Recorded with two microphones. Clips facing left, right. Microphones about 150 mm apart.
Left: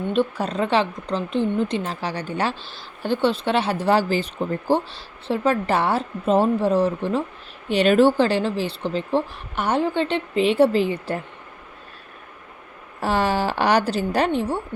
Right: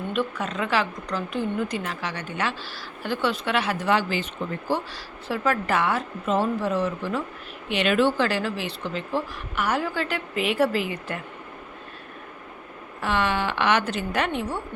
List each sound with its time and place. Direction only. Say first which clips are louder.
0.1 s speech: left 5 dB; 30° left (ahead or behind)
13.0 s speech: left 3 dB; 35° left (ahead or behind)